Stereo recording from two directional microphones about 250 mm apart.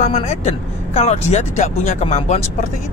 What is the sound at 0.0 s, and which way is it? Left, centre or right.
Speech, left.